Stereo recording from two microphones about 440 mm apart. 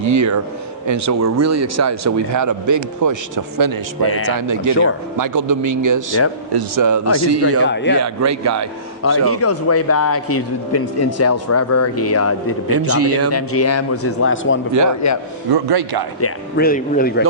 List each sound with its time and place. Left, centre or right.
0.0 s speech: right
4.0 s speech: left
4.4 s speech: right
7.6 s speech: left
7.9 s speech: right
9.2 s speech: left
12.6 s speech: right
13.3 s speech: left
15.0 s speech: left
15.5 s speech: right
16.2 s speech: left